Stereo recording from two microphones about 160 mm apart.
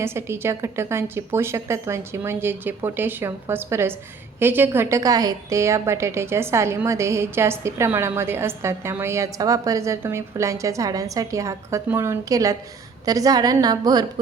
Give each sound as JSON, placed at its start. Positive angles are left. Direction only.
{"t": 0.0, "sound": "a woman's voice", "side_deg": -15}